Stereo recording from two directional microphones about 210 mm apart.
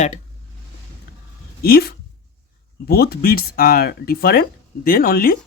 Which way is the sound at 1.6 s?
45° left (ahead or behind).